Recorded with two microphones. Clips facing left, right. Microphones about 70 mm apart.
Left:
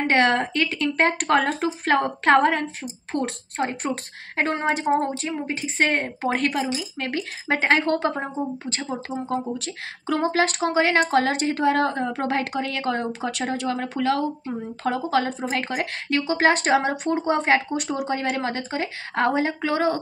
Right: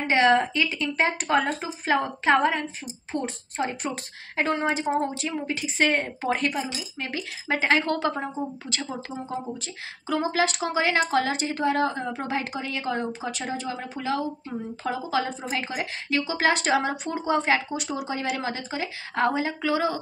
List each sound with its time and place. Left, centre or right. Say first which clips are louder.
0.0 s a woman's voice: even; left
3.5 s a woman's voice: left 3 dB; left
9.3 s a woman's voice: left 7 dB; left